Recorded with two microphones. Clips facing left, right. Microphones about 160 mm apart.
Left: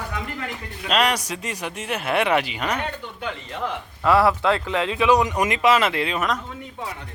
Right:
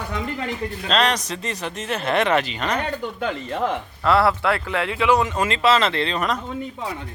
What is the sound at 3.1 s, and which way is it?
Speech, 45° right (ahead or behind).